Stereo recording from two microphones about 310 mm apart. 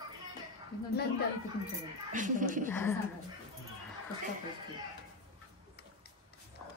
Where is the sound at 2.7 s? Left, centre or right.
Centre.